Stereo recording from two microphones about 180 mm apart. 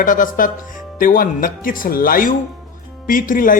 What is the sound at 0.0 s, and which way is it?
Speech, 50° left (ahead or behind).